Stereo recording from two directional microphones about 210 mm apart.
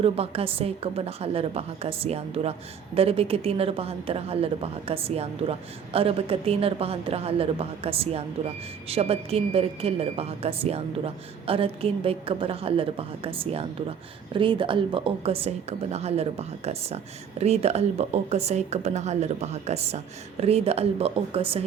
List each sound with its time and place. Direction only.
0.0 s a woman's voice: 30° right (ahead or behind)